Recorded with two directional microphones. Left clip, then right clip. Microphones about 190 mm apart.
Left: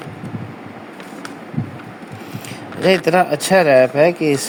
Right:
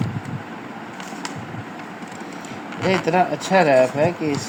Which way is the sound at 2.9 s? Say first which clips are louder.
Left 5 dB; 50° left (ahead or behind).